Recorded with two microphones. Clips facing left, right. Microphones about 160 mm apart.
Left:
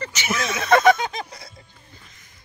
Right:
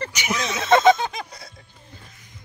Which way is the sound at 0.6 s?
20° right (ahead or behind).